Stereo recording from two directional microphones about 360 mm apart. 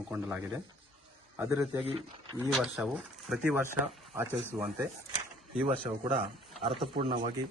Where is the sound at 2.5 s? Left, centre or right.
Centre.